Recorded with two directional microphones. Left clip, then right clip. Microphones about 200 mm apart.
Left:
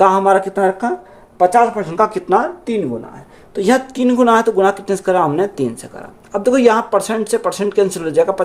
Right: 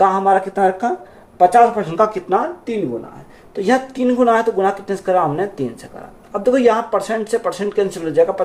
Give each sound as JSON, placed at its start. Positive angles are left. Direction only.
{"t": 0.0, "sound": "speech", "side_deg": 50}
{"t": 1.4, "sound": "speech", "side_deg": 20}
{"t": 2.1, "sound": "a woman's voice", "side_deg": 50}